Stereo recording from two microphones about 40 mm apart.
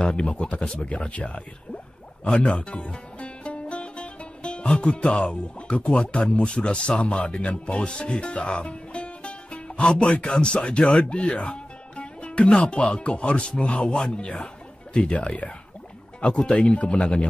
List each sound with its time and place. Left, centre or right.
0.0 s speech: left
16.2 s speech: left